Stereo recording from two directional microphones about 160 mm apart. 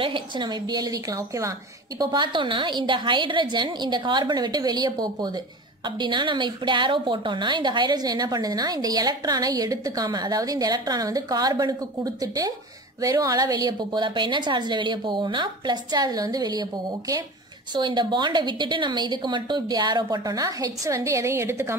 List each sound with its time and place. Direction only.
0.0 s a woman's voice: 30° right (ahead or behind)
17.7 s a woman's voice: 30° right (ahead or behind)